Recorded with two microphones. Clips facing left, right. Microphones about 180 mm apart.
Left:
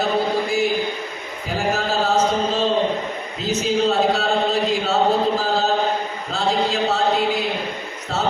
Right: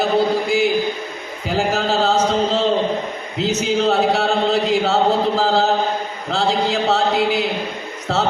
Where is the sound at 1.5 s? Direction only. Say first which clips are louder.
Right 3 dB; 70° right (ahead or behind).